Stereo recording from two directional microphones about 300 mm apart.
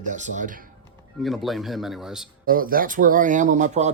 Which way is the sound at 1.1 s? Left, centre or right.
Centre.